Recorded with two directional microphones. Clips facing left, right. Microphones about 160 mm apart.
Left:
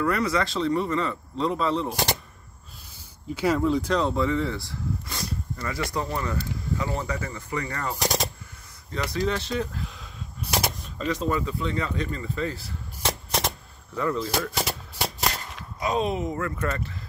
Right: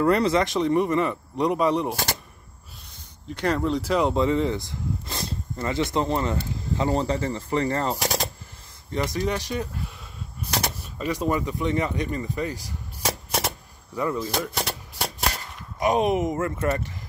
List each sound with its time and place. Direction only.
0.0 s a man's voice: 30° right (ahead or behind)
3.3 s speech: 5° left (ahead or behind)
4.0 s speech: 20° right (ahead or behind)
8.0 s machine gun: centre (ahead or behind)
8.9 s a man's voice: 20° right (ahead or behind)
10.8 s speech: 10° right (ahead or behind)
13.3 s a sound: 5° right (ahead or behind)
13.9 s a man's voice: 15° right (ahead or behind)
14.5 s a sound: centre (ahead or behind)
15.8 s speech: 20° right (ahead or behind)